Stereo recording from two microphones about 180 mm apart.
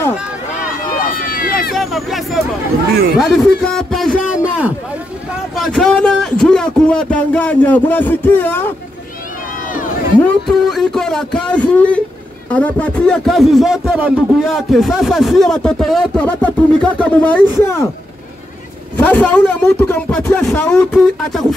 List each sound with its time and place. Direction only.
0.8 s run: 55° left (ahead or behind)
1.7 s hubbub: centre (ahead or behind)
3.2 s a man's voice: centre (ahead or behind)
10.7 s a man's voice: centre (ahead or behind)
18.9 s a man's voice: 10° left (ahead or behind)